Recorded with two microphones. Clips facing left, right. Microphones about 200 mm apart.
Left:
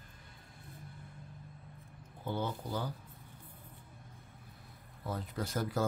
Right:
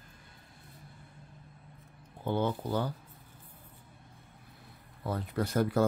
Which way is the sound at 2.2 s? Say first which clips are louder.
Right 6 dB; 65° right (ahead or behind).